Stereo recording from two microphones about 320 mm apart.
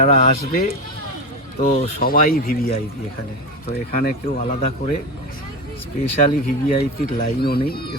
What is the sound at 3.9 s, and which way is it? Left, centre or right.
Speech, left.